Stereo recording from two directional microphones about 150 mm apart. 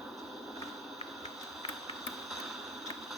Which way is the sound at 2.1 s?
Centre (ahead or behind).